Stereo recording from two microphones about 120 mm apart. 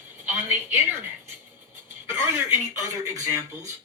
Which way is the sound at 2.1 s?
20° right (ahead or behind).